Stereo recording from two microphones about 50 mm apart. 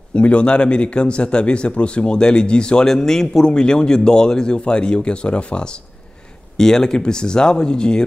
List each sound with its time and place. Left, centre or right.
0.1 s speech: left